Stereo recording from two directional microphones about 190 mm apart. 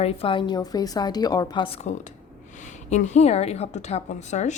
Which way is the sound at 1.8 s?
40° left (ahead or behind).